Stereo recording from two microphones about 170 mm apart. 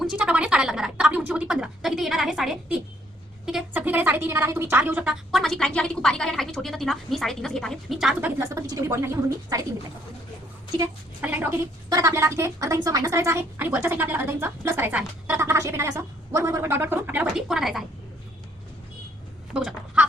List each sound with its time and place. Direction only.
0.0 s a woman's voice: 5° right (ahead or behind)
8.4 s a woman's voice: 20° right (ahead or behind)
11.2 s a woman's voice: 10° right (ahead or behind)
19.5 s speech: 5° right (ahead or behind)